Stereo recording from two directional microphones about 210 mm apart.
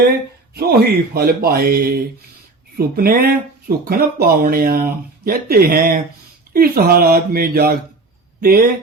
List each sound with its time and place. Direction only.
0.5 s speech: 45° right (ahead or behind)